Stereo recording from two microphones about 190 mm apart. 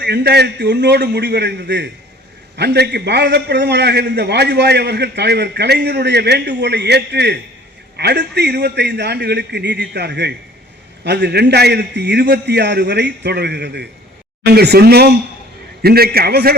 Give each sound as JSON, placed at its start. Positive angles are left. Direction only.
{"t": 0.0, "sound": "a man's voice", "side_deg": -60}